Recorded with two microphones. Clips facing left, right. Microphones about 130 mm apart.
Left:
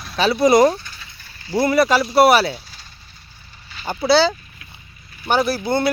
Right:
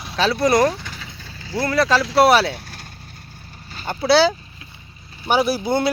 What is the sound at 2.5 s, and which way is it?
Vehicle, 60° right (ahead or behind).